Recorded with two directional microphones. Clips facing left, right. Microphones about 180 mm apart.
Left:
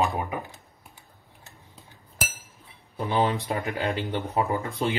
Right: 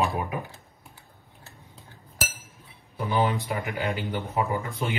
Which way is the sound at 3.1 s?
30° left (ahead or behind).